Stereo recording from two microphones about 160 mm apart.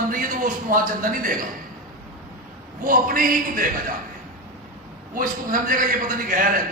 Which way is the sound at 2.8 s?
60° right (ahead or behind).